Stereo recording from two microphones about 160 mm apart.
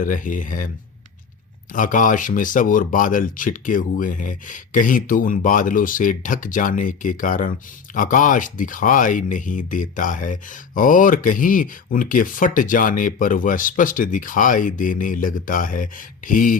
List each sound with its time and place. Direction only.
0.0 s speech: 55° left (ahead or behind)
1.7 s speech: 55° left (ahead or behind)